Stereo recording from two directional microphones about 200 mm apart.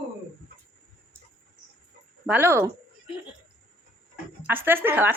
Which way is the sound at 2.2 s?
10° right (ahead or behind).